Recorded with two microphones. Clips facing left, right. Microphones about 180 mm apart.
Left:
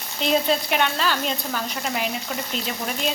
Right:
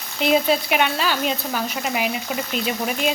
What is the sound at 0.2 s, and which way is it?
Speech, 10° right (ahead or behind).